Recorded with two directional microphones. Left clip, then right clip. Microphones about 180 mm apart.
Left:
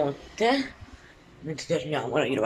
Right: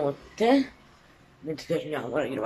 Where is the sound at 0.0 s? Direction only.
15° right (ahead or behind).